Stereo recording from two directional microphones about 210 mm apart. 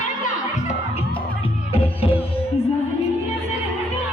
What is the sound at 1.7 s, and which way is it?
Music, 25° left (ahead or behind).